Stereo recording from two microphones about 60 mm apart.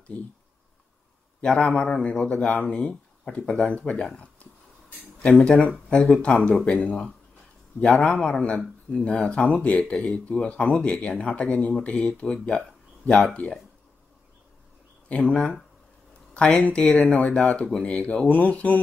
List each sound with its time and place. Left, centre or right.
0.1 s speech: left
1.4 s speech: centre
5.4 s speech: centre
15.2 s speech: centre
16.5 s speech: centre